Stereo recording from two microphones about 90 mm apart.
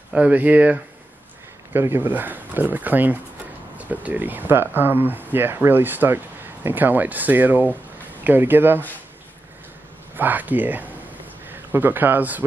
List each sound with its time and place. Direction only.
0.1 s speech: 15° right (ahead or behind)
1.7 s speech: 25° right (ahead or behind)
10.1 s a man's voice: 20° right (ahead or behind)